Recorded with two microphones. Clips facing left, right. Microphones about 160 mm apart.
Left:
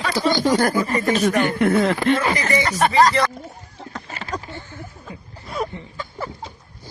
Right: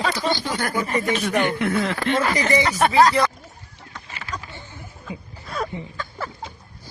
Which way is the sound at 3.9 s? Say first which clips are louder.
Left 5 dB; 45° left (ahead or behind).